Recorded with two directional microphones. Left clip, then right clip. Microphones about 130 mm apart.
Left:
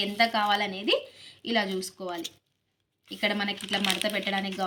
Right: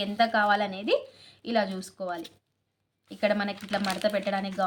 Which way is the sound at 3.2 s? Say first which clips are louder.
Right 1 dB; 50° right (ahead or behind).